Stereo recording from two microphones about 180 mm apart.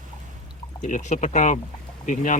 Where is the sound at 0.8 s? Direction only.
40° left (ahead or behind).